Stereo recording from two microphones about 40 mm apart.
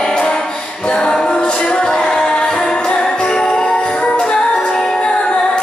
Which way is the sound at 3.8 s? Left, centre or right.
Left.